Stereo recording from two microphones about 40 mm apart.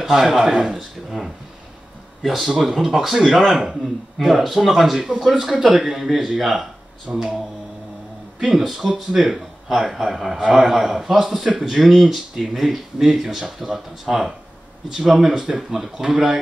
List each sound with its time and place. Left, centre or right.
0.0 s a man's voice: centre
7.1 s speech: centre
8.4 s a man's voice: centre